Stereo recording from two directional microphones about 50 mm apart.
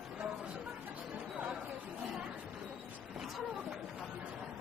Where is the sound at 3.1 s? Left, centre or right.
Centre.